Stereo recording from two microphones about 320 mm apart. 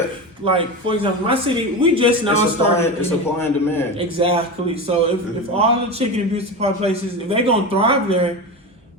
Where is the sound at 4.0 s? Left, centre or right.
Centre.